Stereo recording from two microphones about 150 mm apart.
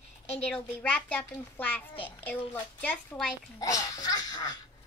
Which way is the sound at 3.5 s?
25° left (ahead or behind).